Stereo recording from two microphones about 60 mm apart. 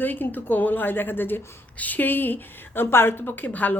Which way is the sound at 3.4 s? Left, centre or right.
Left.